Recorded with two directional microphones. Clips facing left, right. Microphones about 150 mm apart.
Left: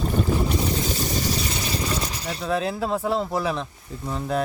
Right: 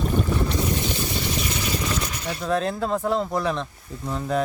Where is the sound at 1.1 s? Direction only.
30° left (ahead or behind).